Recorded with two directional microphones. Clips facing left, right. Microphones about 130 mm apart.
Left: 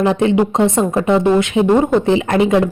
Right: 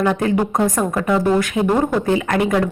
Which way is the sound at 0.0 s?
25° left (ahead or behind).